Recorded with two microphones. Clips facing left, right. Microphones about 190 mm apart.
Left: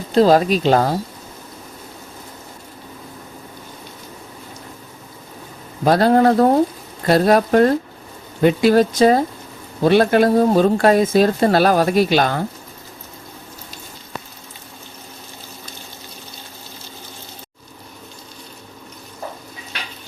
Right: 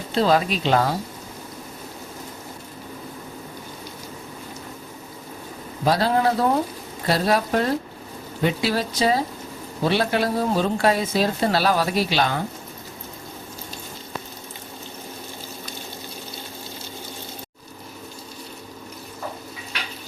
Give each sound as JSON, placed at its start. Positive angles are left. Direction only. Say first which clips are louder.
{"t": 0.1, "sound": "speech", "louder": "left 7 dB", "side_deg": 40}
{"t": 5.8, "sound": "speech", "louder": "left 6 dB", "side_deg": 50}